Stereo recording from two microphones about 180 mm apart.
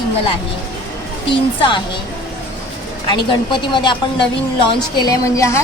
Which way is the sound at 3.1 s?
25° left (ahead or behind).